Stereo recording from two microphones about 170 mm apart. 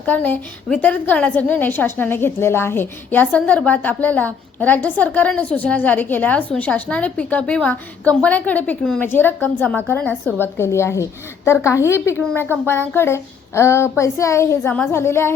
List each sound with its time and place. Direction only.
0.0 s a woman's voice: 10° left (ahead or behind)